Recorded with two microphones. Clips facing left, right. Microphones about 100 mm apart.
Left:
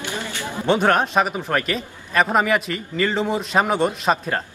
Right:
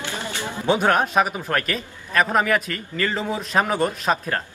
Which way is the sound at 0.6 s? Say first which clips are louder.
Left 1 dB; centre (ahead or behind).